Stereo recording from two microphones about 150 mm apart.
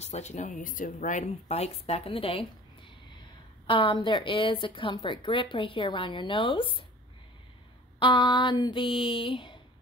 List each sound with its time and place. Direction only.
0.0 s speech: 50° left (ahead or behind)
3.6 s a woman's voice: 35° left (ahead or behind)
8.0 s a woman's voice: 30° left (ahead or behind)